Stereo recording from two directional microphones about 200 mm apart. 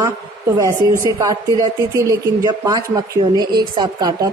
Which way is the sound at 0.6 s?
15° right (ahead or behind).